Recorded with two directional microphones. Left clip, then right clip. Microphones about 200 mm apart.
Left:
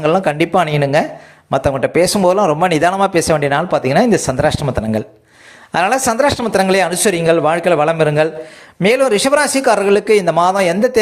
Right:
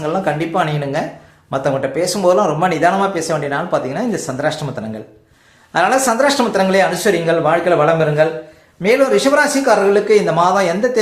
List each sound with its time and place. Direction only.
0.0 s speech: 40° left (ahead or behind)
5.7 s speech: 40° left (ahead or behind)